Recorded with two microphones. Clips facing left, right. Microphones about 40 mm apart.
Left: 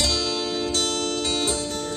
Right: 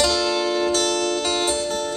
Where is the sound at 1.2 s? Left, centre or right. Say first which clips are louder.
Right 3 dB; right.